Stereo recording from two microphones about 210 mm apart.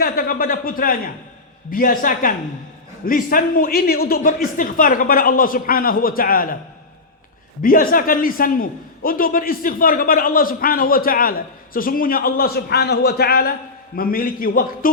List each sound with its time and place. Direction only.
0.0 s a man's voice: 45° left (ahead or behind)
7.6 s a man's voice: 45° left (ahead or behind)